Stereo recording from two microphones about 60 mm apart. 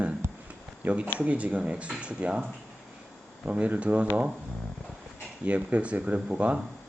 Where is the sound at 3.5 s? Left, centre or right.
Right.